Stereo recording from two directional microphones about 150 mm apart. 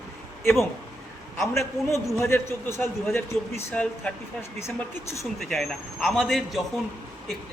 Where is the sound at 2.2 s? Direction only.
15° left (ahead or behind).